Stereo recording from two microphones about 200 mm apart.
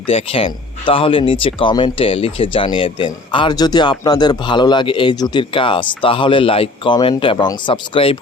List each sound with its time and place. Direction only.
0.1 s speech: 30° left (ahead or behind)